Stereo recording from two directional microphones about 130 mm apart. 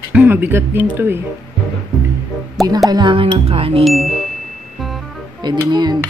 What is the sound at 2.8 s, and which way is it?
Speech, 35° right (ahead or behind).